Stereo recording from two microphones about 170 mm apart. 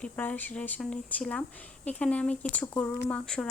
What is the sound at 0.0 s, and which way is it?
Speech, 10° left (ahead or behind).